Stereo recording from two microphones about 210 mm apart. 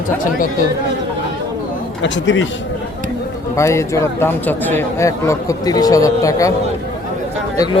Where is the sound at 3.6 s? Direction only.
15° left (ahead or behind).